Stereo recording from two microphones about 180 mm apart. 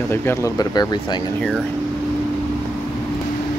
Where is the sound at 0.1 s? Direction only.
15° left (ahead or behind).